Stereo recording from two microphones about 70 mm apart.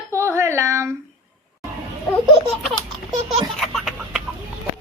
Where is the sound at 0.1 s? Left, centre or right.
Right.